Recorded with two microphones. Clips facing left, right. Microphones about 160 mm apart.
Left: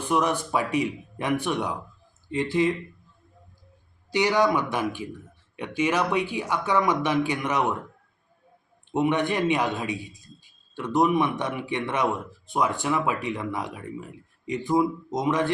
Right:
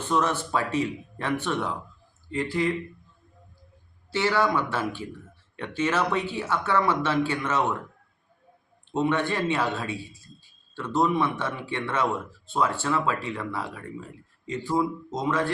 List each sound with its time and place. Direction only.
0.0 s speech: 15° left (ahead or behind)
4.1 s speech: 15° left (ahead or behind)
8.9 s speech: 15° left (ahead or behind)